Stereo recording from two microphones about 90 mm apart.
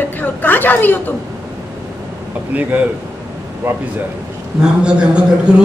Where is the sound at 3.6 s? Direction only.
20° right (ahead or behind).